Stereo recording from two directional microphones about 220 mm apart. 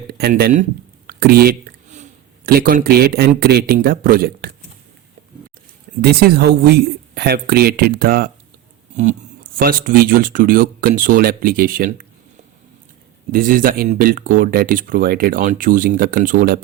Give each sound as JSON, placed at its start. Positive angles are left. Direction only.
{"t": 0.1, "sound": "speech", "side_deg": -45}
{"t": 1.0, "sound": "a sound", "side_deg": -45}
{"t": 2.5, "sound": "speech", "side_deg": -40}
{"t": 6.0, "sound": "speech", "side_deg": -45}
{"t": 13.3, "sound": "speech", "side_deg": -40}